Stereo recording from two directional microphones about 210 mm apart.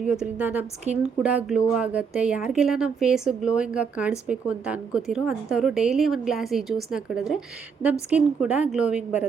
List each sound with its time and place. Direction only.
0.1 s a woman's voice: 5° right (ahead or behind)
0.9 s a woman's voice: 35° right (ahead or behind)
1.2 s a woman's voice: 5° right (ahead or behind)